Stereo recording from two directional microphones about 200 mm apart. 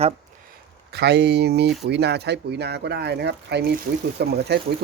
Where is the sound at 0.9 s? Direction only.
55° right (ahead or behind).